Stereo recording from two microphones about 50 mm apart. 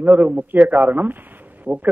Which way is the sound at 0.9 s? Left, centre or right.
Right.